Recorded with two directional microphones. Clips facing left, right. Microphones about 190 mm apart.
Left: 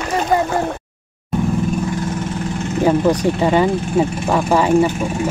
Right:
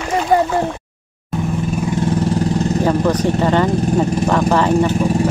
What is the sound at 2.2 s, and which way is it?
Vehicle, 35° right (ahead or behind).